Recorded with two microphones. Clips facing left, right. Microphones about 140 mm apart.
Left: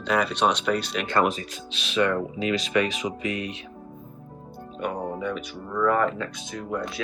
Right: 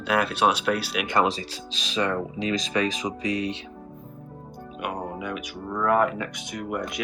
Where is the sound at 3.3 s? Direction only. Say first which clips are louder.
Right 4 dB; 30° right (ahead or behind).